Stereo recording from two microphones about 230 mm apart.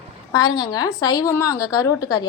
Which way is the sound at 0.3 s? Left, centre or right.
Centre.